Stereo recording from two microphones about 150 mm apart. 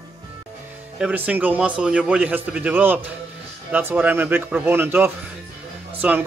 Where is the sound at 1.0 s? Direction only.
5° right (ahead or behind).